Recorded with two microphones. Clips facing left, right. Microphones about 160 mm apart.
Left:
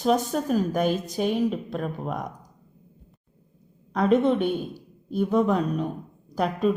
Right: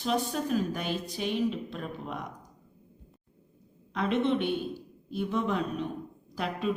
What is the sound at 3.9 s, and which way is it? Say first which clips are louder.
A woman's voice: left 7 dB; 40° left (ahead or behind).